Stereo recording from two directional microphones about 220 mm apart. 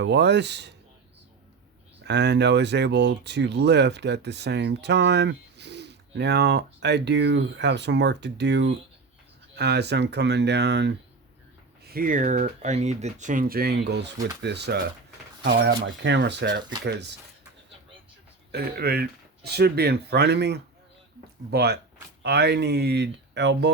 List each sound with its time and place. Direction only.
0.0 s speech: 50° right (ahead or behind)
2.0 s speech: 50° right (ahead or behind)
11.9 s speech: 40° right (ahead or behind)
18.5 s speech: 45° right (ahead or behind)